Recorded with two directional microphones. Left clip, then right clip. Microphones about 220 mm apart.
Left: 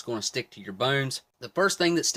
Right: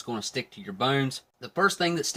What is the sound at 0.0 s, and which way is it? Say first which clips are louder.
Speech: left 1 dB; 45° left (ahead or behind).